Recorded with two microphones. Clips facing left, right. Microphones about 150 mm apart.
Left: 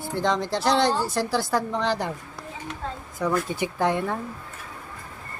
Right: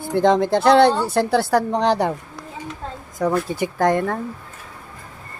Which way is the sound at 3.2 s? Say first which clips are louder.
Right 4 dB; 35° right (ahead or behind).